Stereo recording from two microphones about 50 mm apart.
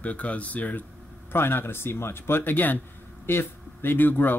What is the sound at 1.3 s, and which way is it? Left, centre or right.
Speech, left.